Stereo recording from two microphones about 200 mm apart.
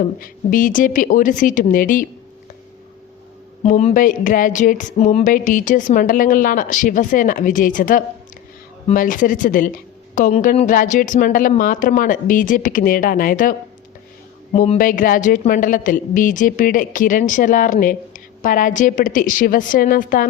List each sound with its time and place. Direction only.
0.2 s speech: 40° left (ahead or behind)
3.6 s speech: 35° left (ahead or behind)
14.5 s speech: 35° left (ahead or behind)